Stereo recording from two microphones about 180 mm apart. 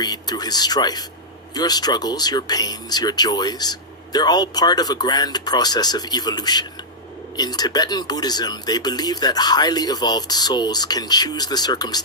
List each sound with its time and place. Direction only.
0.0 s speech: 20° left (ahead or behind)